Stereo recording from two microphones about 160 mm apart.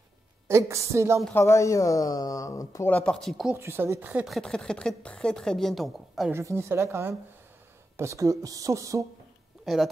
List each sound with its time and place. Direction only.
0.5 s a woman's voice: 15° right (ahead or behind)
1.3 s speech: 20° left (ahead or behind)
2.9 s speech: 5° left (ahead or behind)
3.5 s speech: 15° right (ahead or behind)
6.3 s a woman's voice: 15° right (ahead or behind)
9.7 s speech: centre (ahead or behind)